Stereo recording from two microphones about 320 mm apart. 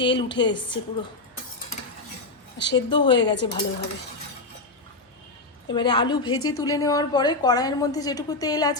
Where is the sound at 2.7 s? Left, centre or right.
Centre.